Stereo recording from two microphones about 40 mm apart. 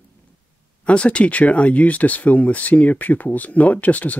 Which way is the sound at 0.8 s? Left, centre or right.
Left.